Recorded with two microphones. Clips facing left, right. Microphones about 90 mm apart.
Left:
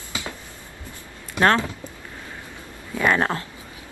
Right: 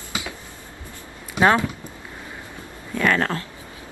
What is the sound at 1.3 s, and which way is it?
Speech, 15° right (ahead or behind).